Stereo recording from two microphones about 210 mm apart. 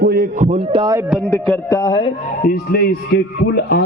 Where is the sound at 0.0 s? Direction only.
45° right (ahead or behind); by 1.0 s 20° right (ahead or behind).